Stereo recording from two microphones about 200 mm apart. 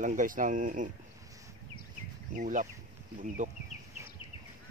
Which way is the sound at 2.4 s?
40° right (ahead or behind).